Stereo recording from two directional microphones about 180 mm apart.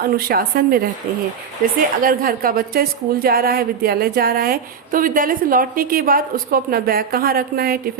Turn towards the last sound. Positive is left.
turn(degrees=-55)  # may be behind; listen again after turning